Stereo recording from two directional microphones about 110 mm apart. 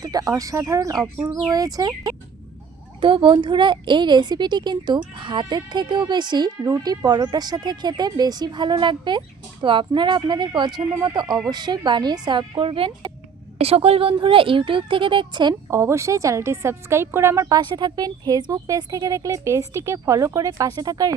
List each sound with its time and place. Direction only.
0.0 s speech: 35° right (ahead or behind)
3.0 s a woman's voice: 50° right (ahead or behind)
15.7 s a woman's voice: 25° right (ahead or behind)